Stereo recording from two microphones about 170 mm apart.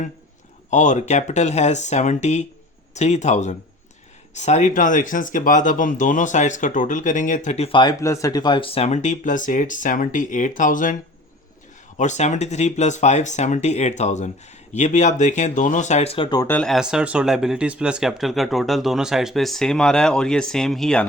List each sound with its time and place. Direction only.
0.7 s speech: 45° left (ahead or behind); by 7.9 s 30° left (ahead or behind)
8.0 s speech: 20° left (ahead or behind); by 10.9 s 50° left (ahead or behind)
11.9 s speech: 45° left (ahead or behind); by 16.5 s 25° left (ahead or behind)
16.5 s speech: 5° left (ahead or behind)